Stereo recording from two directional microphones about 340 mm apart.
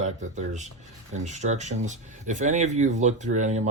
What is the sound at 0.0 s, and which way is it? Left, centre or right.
Speech, right.